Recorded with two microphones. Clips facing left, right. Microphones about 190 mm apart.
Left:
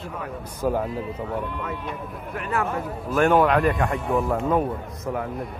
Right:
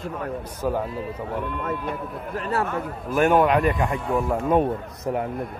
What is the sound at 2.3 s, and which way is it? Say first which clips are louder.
Speech: right 1 dB; 35° right (ahead or behind).